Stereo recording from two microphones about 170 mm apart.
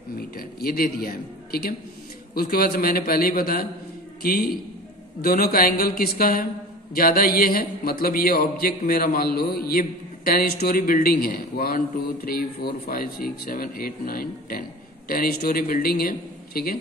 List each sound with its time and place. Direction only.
0.4 s a man's voice: 60° left (ahead or behind)
12.8 s a man's voice: 60° left (ahead or behind)